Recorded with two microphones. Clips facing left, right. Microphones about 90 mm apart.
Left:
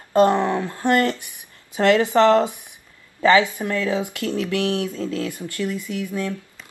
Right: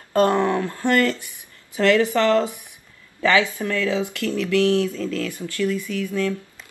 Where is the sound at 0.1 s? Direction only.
20° left (ahead or behind).